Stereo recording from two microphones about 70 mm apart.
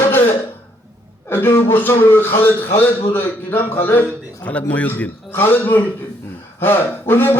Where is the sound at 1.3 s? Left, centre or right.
Left.